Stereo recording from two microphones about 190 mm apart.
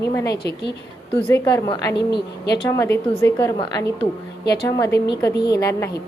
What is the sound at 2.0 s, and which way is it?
Speech, 60° left (ahead or behind).